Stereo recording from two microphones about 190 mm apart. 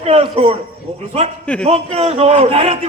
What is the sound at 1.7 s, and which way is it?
A man's voice, 30° right (ahead or behind).